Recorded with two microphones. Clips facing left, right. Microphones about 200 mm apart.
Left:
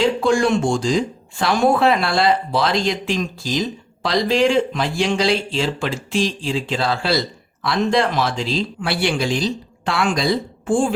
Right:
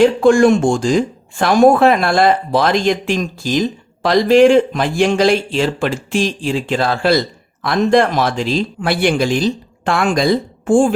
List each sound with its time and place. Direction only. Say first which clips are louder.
0.0 s speech: right 7 dB; 50° right (ahead or behind)